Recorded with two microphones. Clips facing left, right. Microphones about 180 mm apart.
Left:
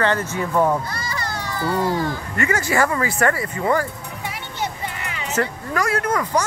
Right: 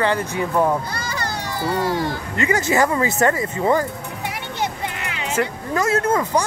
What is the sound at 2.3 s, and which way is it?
Speech, 20° right (ahead or behind).